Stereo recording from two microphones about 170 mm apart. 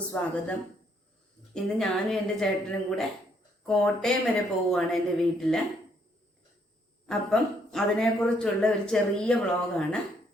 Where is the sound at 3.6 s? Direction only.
5° left (ahead or behind).